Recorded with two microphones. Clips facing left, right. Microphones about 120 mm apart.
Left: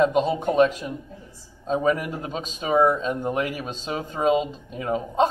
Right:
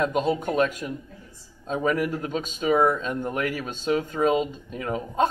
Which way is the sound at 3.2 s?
15° left (ahead or behind).